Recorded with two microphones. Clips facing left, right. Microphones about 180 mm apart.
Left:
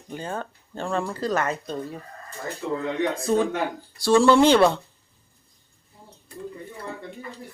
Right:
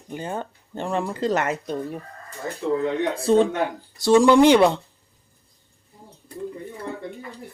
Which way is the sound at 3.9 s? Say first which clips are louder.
Right 2 dB; 20° right (ahead or behind).